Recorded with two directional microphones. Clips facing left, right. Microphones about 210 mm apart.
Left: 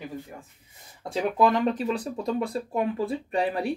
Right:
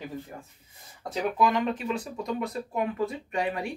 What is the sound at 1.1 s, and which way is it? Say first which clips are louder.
Speech: left 3 dB; 35° left (ahead or behind).